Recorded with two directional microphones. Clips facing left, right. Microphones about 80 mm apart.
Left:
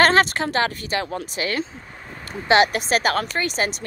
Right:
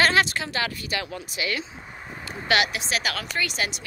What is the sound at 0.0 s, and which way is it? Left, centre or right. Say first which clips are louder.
A woman's voice: left 5 dB; left.